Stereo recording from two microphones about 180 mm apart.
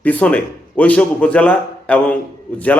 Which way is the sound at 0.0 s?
10° left (ahead or behind).